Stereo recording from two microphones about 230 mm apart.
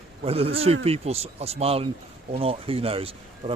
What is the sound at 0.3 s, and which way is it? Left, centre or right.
Speech, right.